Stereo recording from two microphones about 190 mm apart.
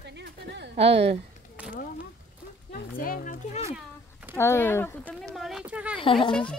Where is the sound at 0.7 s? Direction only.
30° right (ahead or behind).